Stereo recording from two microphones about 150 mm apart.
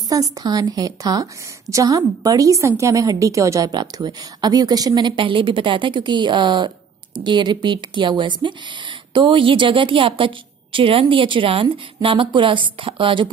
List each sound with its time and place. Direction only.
0.1 s a woman's voice: 25° right (ahead or behind)